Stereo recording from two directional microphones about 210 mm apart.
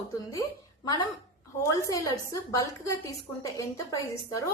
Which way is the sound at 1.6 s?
15° left (ahead or behind).